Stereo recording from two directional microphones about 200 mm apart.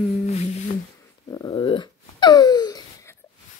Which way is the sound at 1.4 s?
20° left (ahead or behind).